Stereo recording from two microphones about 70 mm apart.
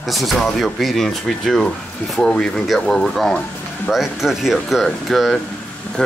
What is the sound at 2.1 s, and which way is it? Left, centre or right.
Speech, centre.